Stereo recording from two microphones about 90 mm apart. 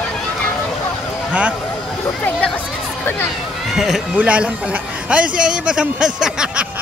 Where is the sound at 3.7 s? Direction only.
Centre (ahead or behind).